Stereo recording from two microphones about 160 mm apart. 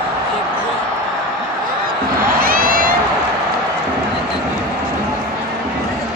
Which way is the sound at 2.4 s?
65° right (ahead or behind).